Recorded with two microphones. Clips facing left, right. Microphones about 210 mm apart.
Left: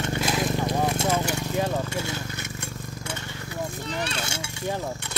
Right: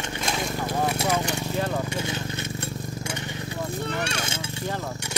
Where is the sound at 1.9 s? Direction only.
15° right (ahead or behind).